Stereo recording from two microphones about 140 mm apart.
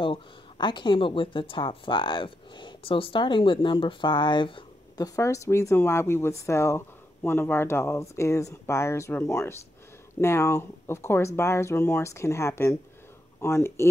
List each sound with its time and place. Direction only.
0.0 s speech: 35° left (ahead or behind); by 9.2 s 20° left (ahead or behind)
10.2 s speech: 20° left (ahead or behind)